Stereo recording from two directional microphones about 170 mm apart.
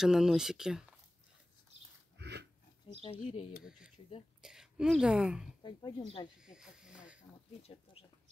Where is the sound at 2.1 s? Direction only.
85° right.